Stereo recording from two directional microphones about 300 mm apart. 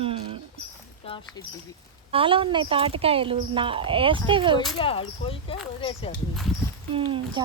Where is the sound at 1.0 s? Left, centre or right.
Centre.